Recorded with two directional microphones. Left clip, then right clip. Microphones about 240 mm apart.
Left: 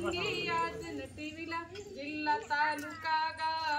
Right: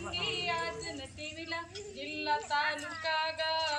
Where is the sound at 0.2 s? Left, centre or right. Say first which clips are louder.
Even; left.